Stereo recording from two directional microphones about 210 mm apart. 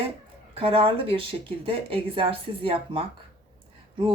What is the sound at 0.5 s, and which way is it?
Speech, 25° right (ahead or behind).